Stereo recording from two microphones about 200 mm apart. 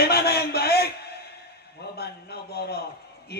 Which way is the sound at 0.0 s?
55° left (ahead or behind).